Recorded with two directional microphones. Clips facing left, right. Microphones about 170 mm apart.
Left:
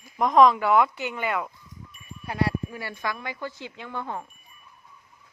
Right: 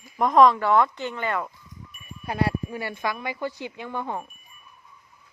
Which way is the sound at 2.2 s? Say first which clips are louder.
Right 1 dB; 25° right (ahead or behind).